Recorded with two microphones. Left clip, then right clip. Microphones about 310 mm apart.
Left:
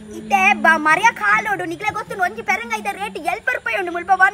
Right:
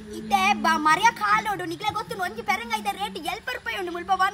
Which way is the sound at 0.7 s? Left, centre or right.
Centre.